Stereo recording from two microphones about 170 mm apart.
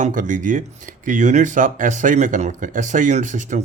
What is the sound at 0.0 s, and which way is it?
Speech, 50° right (ahead or behind).